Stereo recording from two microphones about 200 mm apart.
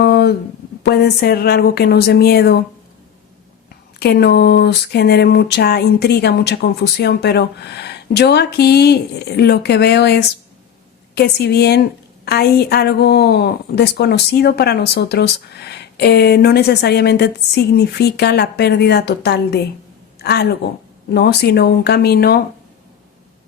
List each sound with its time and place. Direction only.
0.0 s a sound: 55° left (ahead or behind)
0.8 s speech: 55° left (ahead or behind)
4.0 s a woman's voice: 55° left (ahead or behind)